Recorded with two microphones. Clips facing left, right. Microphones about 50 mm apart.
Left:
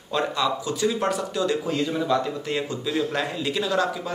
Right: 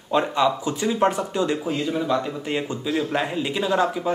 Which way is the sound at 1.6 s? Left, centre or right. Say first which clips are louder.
Even; centre.